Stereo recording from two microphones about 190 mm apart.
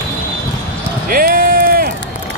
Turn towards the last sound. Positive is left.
turn(degrees=-50)  # may be behind; listen again after turning